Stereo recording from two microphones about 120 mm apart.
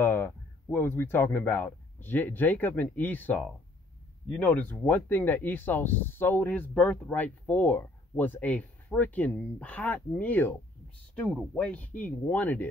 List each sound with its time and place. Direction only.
0.0 s speech: 15° left (ahead or behind)